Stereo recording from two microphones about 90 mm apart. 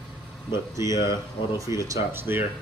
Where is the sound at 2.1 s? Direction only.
25° right (ahead or behind).